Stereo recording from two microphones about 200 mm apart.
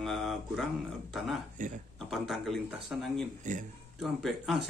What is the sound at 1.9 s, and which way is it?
Speech, centre (ahead or behind).